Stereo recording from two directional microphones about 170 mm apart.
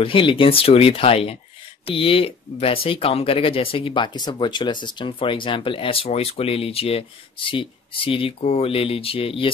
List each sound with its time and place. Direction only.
0.0 s speech: 30° left (ahead or behind)